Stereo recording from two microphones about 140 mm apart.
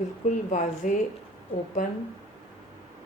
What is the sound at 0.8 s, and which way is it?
Speech, 70° left (ahead or behind).